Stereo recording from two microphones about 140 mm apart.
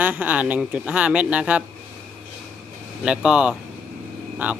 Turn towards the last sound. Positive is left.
turn(degrees=-10)  # may be behind; listen again after turning